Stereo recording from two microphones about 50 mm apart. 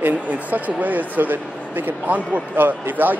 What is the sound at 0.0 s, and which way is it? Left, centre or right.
A man's voice, right.